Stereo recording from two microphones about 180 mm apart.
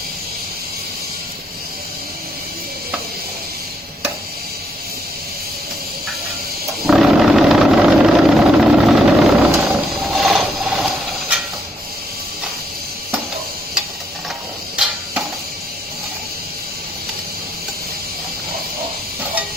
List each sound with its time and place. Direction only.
6.8 s vehicle: centre (ahead or behind)